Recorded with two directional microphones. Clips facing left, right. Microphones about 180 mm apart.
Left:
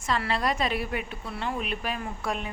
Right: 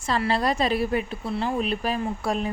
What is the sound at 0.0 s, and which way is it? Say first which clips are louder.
A woman's voice: right 4 dB; 30° right (ahead or behind).